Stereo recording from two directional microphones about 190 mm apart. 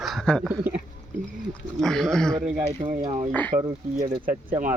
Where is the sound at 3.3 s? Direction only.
10° left (ahead or behind).